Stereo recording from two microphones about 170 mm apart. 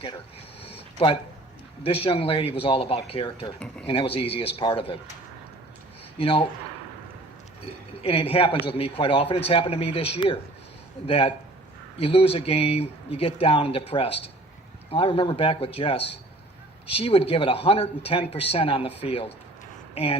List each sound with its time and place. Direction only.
0.6 s a sound: 35° left (ahead or behind)
1.8 s speech: 35° left (ahead or behind)
6.1 s speech: 35° left (ahead or behind)
7.6 s speech: 35° left (ahead or behind)